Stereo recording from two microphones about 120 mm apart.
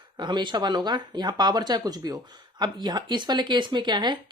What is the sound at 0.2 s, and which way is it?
Speech, 40° right (ahead or behind).